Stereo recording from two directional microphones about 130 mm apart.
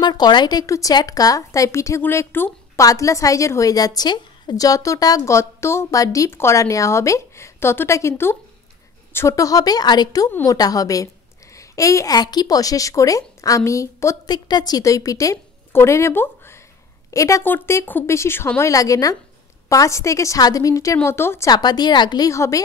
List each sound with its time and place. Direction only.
0.0 s a woman's voice: 35° left (ahead or behind)
21.5 s a woman's voice: 30° left (ahead or behind)